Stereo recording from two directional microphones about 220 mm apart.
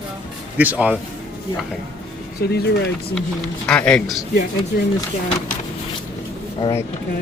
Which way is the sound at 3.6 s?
5° left (ahead or behind).